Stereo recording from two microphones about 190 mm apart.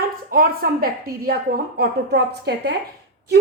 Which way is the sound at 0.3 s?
50° right (ahead or behind).